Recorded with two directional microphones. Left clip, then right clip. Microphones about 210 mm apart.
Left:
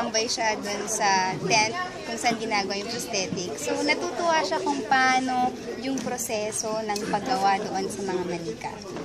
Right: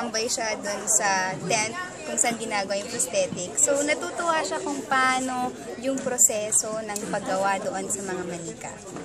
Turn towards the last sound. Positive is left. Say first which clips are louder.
# left 1 dB
turn(degrees=-5)  # may be behind; listen again after turning